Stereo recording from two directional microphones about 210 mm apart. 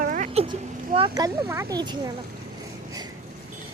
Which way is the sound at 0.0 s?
35° right (ahead or behind).